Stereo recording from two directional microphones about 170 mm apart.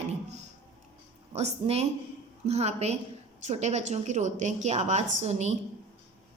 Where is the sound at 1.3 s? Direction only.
40° right (ahead or behind).